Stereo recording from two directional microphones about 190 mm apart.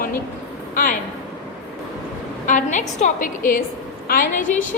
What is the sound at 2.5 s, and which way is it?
A woman's voice, 40° left (ahead or behind).